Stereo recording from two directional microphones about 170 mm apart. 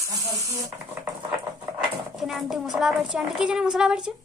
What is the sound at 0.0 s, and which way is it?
Speech, 20° right (ahead or behind).